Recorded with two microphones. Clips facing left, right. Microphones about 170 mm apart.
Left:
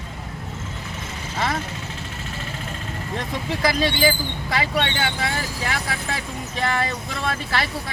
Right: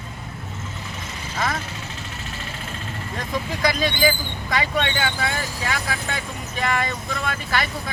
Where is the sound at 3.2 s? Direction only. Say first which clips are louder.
Even; 30° left (ahead or behind).